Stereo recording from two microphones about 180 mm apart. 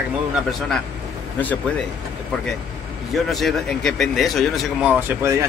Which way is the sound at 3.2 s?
Centre (ahead or behind).